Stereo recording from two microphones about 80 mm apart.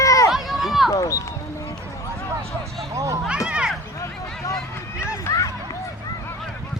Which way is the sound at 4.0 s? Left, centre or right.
Left.